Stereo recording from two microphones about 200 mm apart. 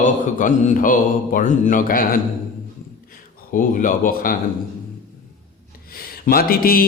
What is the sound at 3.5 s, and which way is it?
Speech, 40° left (ahead or behind).